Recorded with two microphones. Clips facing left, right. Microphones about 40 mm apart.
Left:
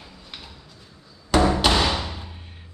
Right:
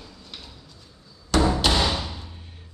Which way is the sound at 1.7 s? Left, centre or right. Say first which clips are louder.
Left 2 dB; left.